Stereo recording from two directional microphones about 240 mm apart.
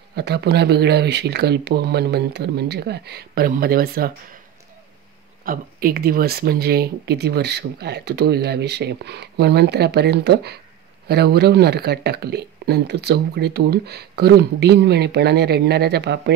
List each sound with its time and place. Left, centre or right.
0.1 s speech: right
5.4 s speech: right